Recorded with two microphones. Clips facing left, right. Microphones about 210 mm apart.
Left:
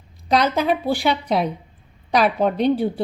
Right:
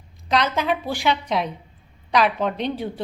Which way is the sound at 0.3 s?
35° left (ahead or behind).